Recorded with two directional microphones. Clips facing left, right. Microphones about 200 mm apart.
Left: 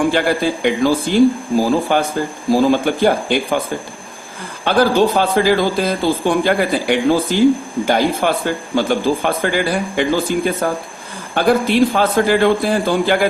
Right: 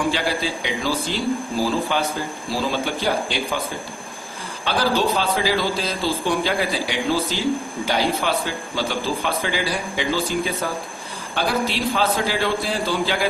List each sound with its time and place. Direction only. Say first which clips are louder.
0.1 s speech: left 7 dB; 55° left (ahead or behind)
4.6 s speech: left 7 dB; 50° left (ahead or behind)